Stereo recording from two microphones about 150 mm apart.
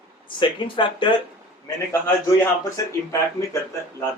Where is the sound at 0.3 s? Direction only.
35° left (ahead or behind).